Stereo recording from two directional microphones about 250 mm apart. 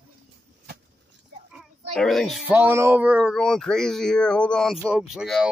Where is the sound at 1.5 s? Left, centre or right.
Centre.